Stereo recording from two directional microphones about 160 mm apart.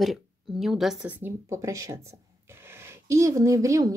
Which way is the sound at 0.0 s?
Centre (ahead or behind).